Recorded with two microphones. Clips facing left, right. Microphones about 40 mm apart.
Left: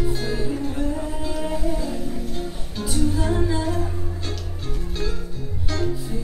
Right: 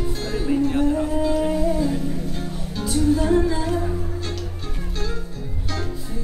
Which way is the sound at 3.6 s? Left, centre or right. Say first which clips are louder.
Right 2 dB; centre.